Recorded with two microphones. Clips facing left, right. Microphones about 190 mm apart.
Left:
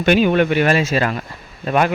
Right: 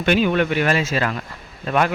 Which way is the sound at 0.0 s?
20° left (ahead or behind).